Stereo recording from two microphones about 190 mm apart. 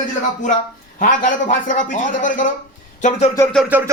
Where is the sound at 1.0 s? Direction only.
45° left (ahead or behind).